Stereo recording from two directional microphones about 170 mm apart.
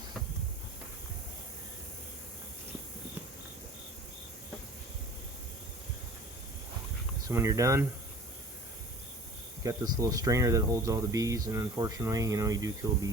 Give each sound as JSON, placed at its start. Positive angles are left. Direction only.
{"t": 7.3, "sound": "speech", "side_deg": -20}
{"t": 9.6, "sound": "speech", "side_deg": -20}